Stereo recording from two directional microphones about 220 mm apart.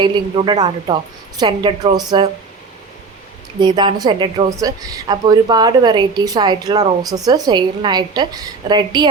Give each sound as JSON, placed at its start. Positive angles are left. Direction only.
{"t": 0.0, "sound": "a woman's voice", "side_deg": -20}
{"t": 3.6, "sound": "a woman's voice", "side_deg": -20}